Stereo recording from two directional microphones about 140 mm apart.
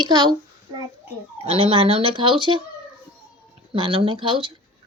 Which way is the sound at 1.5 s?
45° right (ahead or behind).